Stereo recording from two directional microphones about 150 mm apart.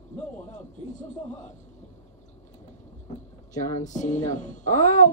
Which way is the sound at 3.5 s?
55° left (ahead or behind).